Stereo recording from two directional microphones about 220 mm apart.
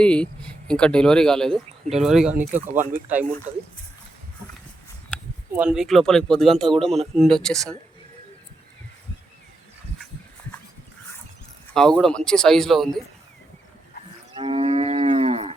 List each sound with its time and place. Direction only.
0.0 s speech: 5° left (ahead or behind)
5.5 s speech: 5° right (ahead or behind)
11.7 s speech: 5° left (ahead or behind)
14.3 s cattle: 25° right (ahead or behind)